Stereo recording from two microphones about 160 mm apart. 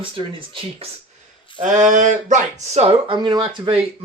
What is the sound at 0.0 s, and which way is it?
Speech, 35° right (ahead or behind).